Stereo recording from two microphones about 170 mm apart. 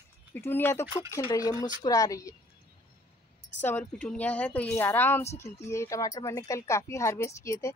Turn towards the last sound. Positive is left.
turn(degrees=15)  # may be behind; listen again after turning